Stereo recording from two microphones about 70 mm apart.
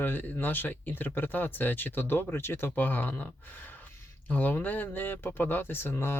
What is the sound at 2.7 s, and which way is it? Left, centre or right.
Speech, left.